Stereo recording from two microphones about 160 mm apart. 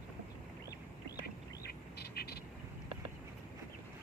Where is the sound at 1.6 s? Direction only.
80° left.